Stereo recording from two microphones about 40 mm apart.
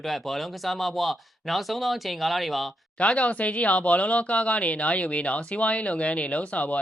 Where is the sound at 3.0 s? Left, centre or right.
Left.